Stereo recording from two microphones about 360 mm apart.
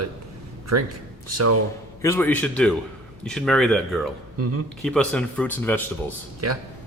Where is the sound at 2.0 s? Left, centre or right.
Centre.